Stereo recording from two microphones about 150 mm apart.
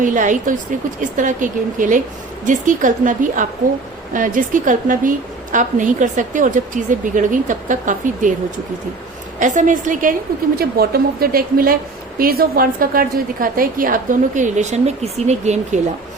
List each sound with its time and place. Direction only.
0.0 s a woman's voice: 60° right (ahead or behind)
9.4 s a woman's voice: 55° right (ahead or behind)
10.6 s a woman's voice: 90° right; by 15.8 s 50° right (ahead or behind)